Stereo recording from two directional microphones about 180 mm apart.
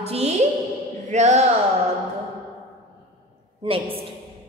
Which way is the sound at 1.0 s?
40° right (ahead or behind).